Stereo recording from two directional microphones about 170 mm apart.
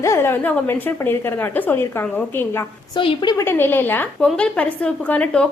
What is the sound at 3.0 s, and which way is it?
Speech, 30° left (ahead or behind).